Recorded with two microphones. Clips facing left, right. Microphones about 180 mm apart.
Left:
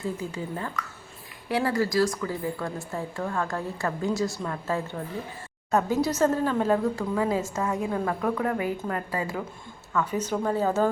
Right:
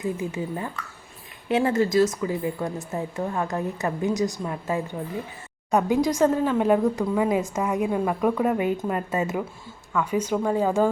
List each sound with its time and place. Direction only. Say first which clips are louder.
0.0 s a woman's voice: right 4 dB; 20° right (ahead or behind)